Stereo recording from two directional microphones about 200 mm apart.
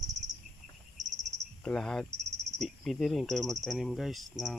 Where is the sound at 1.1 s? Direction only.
40° right (ahead or behind).